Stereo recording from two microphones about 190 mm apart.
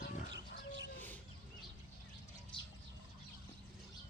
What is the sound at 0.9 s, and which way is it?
Bird, 10° left (ahead or behind).